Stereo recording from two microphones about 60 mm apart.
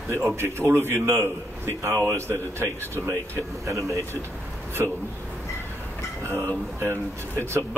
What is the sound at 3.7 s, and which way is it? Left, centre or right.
Speech, right.